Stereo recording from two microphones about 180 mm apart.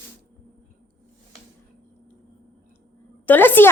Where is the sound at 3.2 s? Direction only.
10° left (ahead or behind).